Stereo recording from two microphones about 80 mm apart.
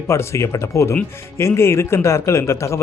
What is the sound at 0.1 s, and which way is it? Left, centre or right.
Speech, left.